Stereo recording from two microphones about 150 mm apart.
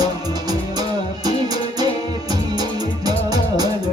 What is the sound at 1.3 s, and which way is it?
Music, 25° right (ahead or behind).